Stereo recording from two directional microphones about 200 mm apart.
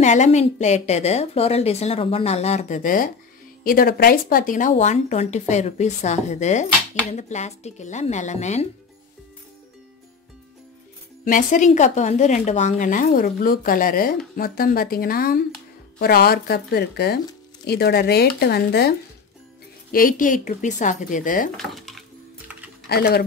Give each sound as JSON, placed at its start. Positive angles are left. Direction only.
{"t": 0.0, "sound": "a woman's voice", "side_deg": 35}
{"t": 11.2, "sound": "a woman's voice", "side_deg": 40}
{"t": 21.5, "sound": "a sound", "side_deg": 0}
{"t": 22.8, "sound": "speech", "side_deg": 50}